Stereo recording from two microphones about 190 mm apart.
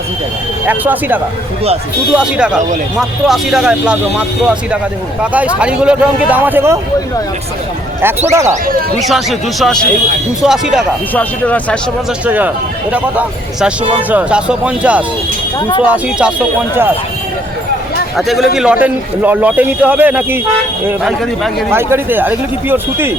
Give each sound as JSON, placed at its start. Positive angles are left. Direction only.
{"t": 0.7, "sound": "a man's voice", "side_deg": -10}
{"t": 5.2, "sound": "a man's voice", "side_deg": -5}
{"t": 8.3, "sound": "a man's voice", "side_deg": -15}
{"t": 9.0, "sound": "a man's voice", "side_deg": 0}
{"t": 11.1, "sound": "speech", "side_deg": 10}
{"t": 12.2, "sound": "a man's voice", "side_deg": -10}
{"t": 15.5, "sound": "speech", "side_deg": 20}
{"t": 15.8, "sound": "a man's voice", "side_deg": -5}
{"t": 18.2, "sound": "a man's voice", "side_deg": 0}
{"t": 21.7, "sound": "a man's voice", "side_deg": -10}